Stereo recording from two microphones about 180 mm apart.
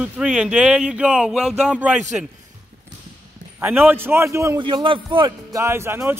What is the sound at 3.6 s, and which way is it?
Speech, 10° right (ahead or behind).